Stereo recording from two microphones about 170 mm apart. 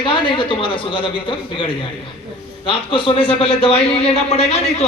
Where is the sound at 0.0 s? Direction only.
30° left (ahead or behind).